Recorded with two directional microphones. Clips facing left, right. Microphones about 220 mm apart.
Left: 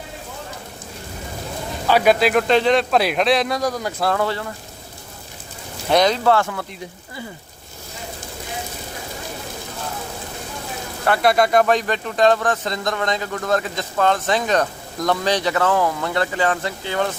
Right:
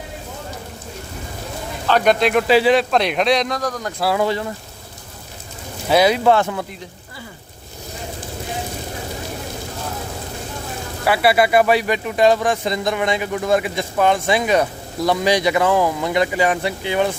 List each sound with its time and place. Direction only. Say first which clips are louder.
1.9 s speech: even; 5° left (ahead or behind)
4.0 s speech: right 3 dB; 10° right (ahead or behind)
5.9 s speech: right 2 dB; 10° right (ahead or behind)
11.0 s speech: right 1 dB; 5° right (ahead or behind)